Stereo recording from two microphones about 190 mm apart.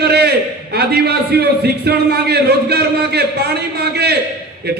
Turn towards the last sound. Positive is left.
turn(degrees=-60)  # may be behind; listen again after turning